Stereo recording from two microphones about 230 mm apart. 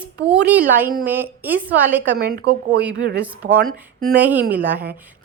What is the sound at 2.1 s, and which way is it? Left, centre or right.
Speech, right.